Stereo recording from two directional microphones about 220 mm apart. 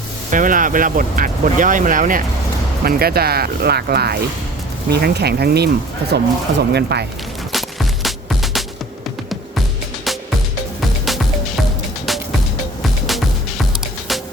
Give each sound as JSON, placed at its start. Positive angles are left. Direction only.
{"t": 0.3, "sound": "speech", "side_deg": -35}
{"t": 7.5, "sound": "music", "side_deg": 0}
{"t": 12.8, "sound": "music", "side_deg": 0}